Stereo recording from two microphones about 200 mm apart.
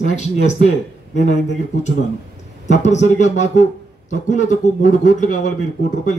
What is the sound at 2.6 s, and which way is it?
A man's voice, 35° left (ahead or behind).